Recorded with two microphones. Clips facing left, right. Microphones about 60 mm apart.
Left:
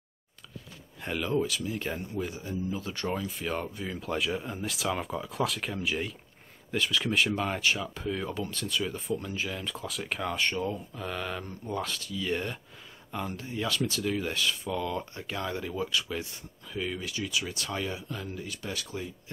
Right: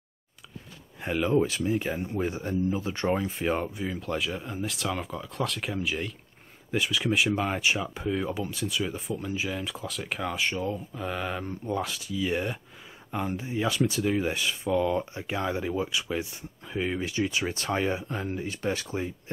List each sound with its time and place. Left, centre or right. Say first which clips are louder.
1.0 s speech: right 5 dB; centre
1.4 s speech: right 5 dB; right; by 6.1 s centre
6.7 s speech: right 2 dB; centre; by 19.1 s right